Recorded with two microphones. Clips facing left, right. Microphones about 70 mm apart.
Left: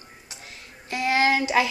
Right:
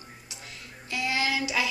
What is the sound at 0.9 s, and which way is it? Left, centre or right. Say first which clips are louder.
Speech: left 7 dB; left.